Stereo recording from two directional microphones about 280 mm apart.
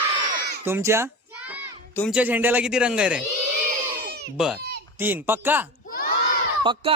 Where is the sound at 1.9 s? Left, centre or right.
Centre.